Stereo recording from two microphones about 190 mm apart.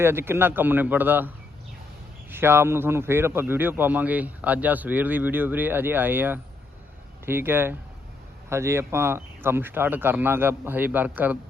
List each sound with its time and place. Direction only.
0.0 s a man's voice: 10° right (ahead or behind)
2.3 s a man's voice: 10° right (ahead or behind)